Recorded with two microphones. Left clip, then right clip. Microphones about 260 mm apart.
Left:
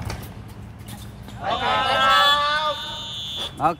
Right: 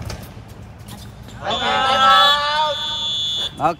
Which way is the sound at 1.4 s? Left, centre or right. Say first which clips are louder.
Right 3 dB; right.